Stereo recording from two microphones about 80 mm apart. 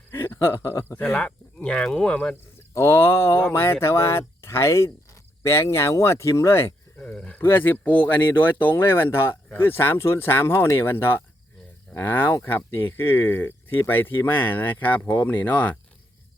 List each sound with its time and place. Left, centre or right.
0.1 s a sound: left
0.4 s speech: left
1.2 s speech: centre
2.7 s speech: left
6.9 s speech: centre